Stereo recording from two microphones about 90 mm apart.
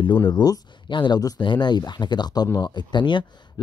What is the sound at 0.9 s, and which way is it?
Speech, 60° left (ahead or behind).